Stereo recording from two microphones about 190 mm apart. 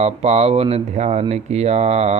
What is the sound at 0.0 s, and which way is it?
Speech, 35° right (ahead or behind).